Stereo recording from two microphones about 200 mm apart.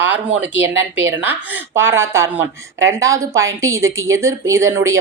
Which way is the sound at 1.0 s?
10° right (ahead or behind).